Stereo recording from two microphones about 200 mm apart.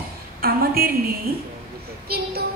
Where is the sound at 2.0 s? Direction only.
50° right (ahead or behind).